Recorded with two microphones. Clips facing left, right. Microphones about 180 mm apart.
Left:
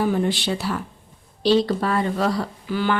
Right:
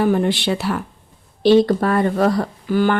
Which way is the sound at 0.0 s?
60° right (ahead or behind).